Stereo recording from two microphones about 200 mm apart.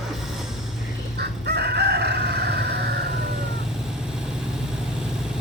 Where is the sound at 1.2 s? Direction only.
55° right (ahead or behind).